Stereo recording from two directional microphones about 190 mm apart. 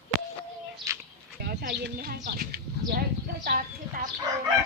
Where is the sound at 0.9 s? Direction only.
15° right (ahead or behind).